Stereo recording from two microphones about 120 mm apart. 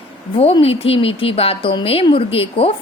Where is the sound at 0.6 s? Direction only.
55° left (ahead or behind).